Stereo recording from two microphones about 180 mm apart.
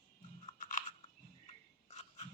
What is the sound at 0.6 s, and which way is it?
Crunch, 45° left (ahead or behind).